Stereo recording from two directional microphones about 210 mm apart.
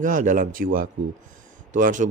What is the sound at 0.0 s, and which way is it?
Speech, 40° right (ahead or behind).